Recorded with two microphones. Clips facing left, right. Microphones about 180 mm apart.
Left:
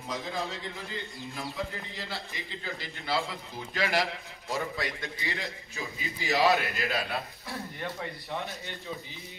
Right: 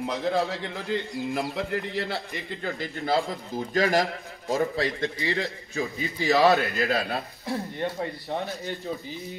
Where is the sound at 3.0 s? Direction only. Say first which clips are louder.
Right 6 dB; 40° right (ahead or behind).